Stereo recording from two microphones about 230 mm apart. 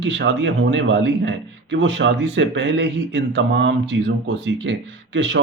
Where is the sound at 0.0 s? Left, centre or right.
Right.